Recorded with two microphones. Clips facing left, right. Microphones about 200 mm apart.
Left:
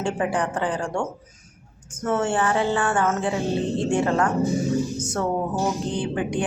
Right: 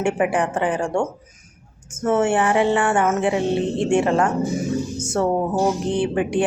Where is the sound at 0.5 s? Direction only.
25° right (ahead or behind).